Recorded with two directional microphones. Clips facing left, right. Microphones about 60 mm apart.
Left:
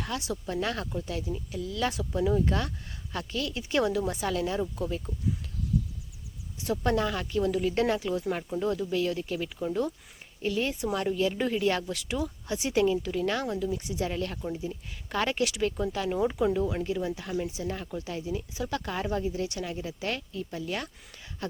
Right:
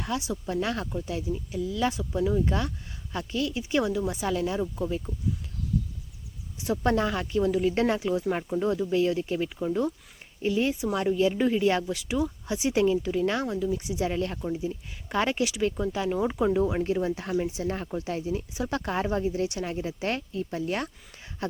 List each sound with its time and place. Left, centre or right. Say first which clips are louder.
0.0 s speech: right 2 dB; centre
1.9 s speech: right 1 dB; centre
6.7 s speech: right 2 dB; right
9.6 s speech: right 2 dB; centre
14.4 s speech: right 3 dB; centre
16.6 s speech: right 4 dB; right
16.8 s speech: right 4 dB; right